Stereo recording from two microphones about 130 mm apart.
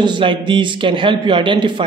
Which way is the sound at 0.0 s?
40° right (ahead or behind).